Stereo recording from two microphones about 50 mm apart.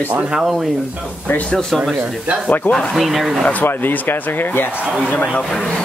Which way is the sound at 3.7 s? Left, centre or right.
Left.